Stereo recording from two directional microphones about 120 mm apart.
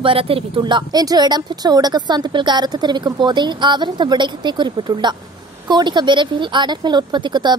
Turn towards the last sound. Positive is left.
turn(degrees=-40)  # may be behind; listen again after turning